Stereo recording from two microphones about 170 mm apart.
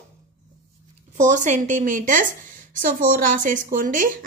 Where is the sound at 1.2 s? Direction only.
45° right (ahead or behind).